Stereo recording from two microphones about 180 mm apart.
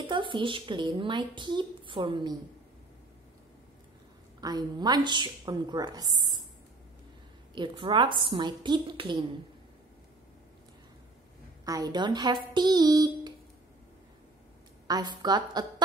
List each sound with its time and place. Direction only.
0.0 s a woman's voice: 25° right (ahead or behind)
4.4 s a woman's voice: 20° right (ahead or behind)
7.5 s a woman's voice: 25° right (ahead or behind)
11.6 s a woman's voice: 20° right (ahead or behind)
14.9 s a woman's voice: 25° right (ahead or behind)